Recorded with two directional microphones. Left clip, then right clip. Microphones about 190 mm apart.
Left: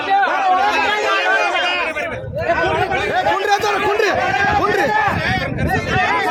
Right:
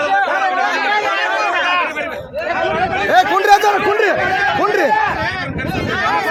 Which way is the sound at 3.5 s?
40° right (ahead or behind).